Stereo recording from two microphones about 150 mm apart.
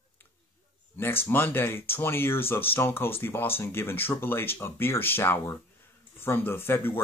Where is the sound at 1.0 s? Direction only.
15° left (ahead or behind).